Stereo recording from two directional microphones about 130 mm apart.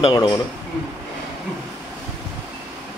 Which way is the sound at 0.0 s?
45° left (ahead or behind).